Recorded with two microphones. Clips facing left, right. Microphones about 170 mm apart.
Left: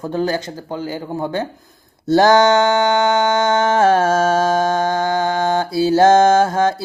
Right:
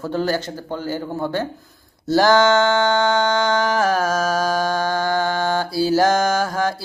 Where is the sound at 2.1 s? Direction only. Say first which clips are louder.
Left 3 dB; 20° left (ahead or behind).